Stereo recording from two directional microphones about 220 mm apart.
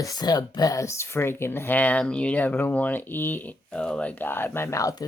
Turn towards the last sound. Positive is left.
turn(degrees=15)  # may be behind; listen again after turning